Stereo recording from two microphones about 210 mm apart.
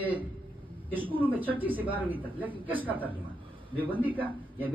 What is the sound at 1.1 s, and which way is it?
Speech, 10° right (ahead or behind).